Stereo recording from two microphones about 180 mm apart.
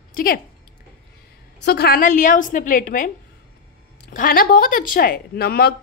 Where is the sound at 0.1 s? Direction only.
55° left (ahead or behind).